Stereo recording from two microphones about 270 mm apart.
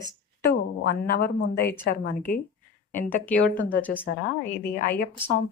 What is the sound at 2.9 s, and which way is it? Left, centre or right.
Speech, centre.